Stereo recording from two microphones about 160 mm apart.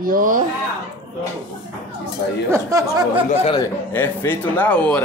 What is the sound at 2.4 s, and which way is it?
Speech, 20° right (ahead or behind).